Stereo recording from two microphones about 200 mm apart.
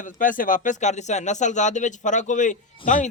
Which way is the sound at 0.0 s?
40° left (ahead or behind).